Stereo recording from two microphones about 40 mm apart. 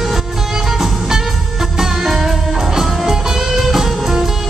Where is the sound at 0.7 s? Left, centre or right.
Centre.